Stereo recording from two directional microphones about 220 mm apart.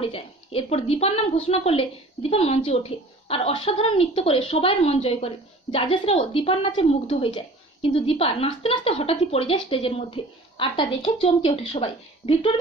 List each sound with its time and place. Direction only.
0.0 s a woman's voice: 25° left (ahead or behind)